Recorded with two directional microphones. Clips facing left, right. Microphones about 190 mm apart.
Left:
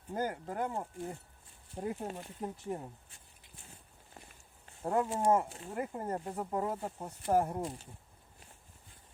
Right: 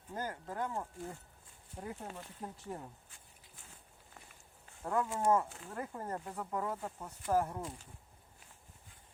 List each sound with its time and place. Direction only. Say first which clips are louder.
0.4 s speech: left 3 dB; 20° left (ahead or behind)
4.8 s speech: left 3 dB; 25° left (ahead or behind)